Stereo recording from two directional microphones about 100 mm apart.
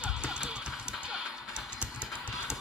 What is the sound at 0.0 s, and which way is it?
Music, 10° right (ahead or behind).